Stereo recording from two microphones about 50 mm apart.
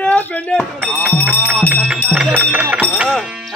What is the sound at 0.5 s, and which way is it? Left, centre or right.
Speech, centre.